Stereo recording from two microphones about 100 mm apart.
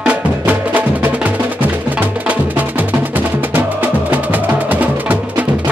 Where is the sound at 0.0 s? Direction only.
15° right (ahead or behind).